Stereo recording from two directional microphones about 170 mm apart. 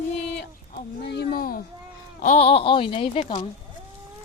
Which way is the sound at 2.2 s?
50° left (ahead or behind).